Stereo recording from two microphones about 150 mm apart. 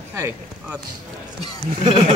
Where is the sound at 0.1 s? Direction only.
20° right (ahead or behind).